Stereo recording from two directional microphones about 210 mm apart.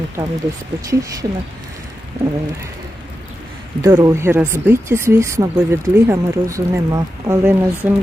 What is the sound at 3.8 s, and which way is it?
Speech, 15° right (ahead or behind).